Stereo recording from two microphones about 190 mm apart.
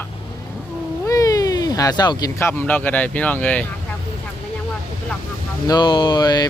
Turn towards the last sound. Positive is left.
turn(degrees=20)  # may be behind; listen again after turning